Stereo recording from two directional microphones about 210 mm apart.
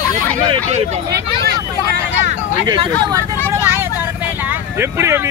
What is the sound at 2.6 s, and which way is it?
Speech, 20° right (ahead or behind).